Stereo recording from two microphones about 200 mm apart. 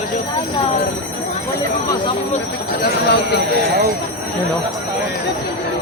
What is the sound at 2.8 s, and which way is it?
Speech, 50° left (ahead or behind).